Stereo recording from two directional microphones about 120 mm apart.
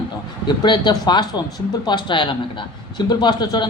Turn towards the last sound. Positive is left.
turn(degrees=35)  # may be behind; listen again after turning